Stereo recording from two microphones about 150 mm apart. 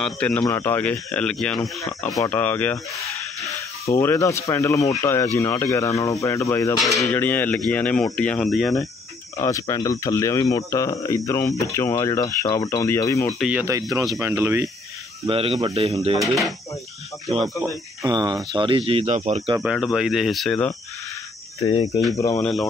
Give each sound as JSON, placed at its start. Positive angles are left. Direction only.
{"t": 0.0, "sound": "speech", "side_deg": 10}
{"t": 3.9, "sound": "speech", "side_deg": 15}
{"t": 9.4, "sound": "speech", "side_deg": 25}
{"t": 13.4, "sound": "speech", "side_deg": -10}
{"t": 13.7, "sound": "speech", "side_deg": -20}
{"t": 15.2, "sound": "speech", "side_deg": -40}
{"t": 17.6, "sound": "speech", "side_deg": -25}
{"t": 19.6, "sound": "speech", "side_deg": -5}
{"t": 22.1, "sound": "speech", "side_deg": 20}
{"t": 22.4, "sound": "speech", "side_deg": 0}